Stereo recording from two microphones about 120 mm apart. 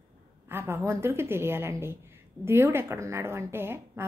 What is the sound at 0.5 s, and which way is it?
Speech, 20° right (ahead or behind).